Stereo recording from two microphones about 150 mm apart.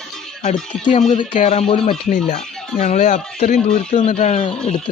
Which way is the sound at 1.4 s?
45° left (ahead or behind).